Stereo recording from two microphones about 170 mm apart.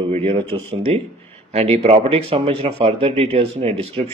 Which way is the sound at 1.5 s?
40° right (ahead or behind).